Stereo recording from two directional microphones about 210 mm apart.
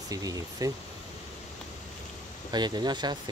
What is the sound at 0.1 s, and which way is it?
Speech, 15° right (ahead or behind).